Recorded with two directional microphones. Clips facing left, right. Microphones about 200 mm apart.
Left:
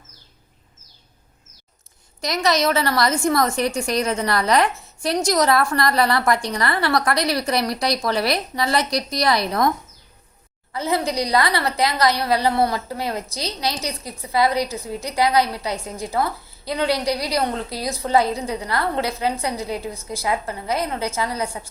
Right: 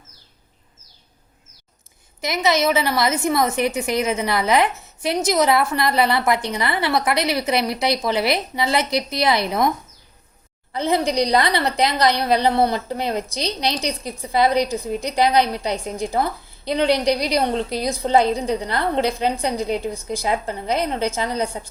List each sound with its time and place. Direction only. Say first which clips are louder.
2.2 s a woman's voice: right 1 dB; 20° right (ahead or behind)